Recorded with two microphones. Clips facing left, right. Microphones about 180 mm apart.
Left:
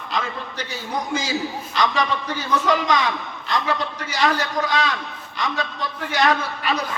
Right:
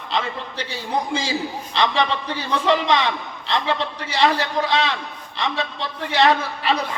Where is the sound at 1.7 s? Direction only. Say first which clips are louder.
Right 1 dB; 30° right (ahead or behind).